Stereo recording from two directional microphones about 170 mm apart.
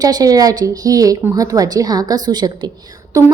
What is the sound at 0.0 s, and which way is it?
A woman's voice, 20° right (ahead or behind).